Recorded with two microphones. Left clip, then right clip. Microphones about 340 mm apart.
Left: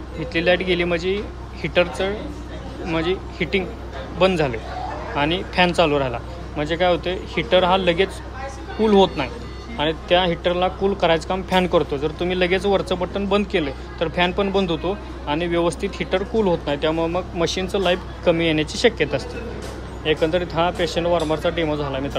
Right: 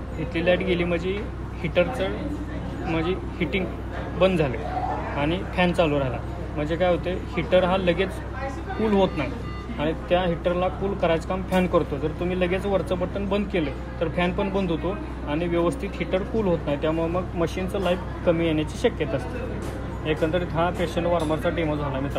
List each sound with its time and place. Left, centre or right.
0.3 s speech: centre
9.8 s speech: left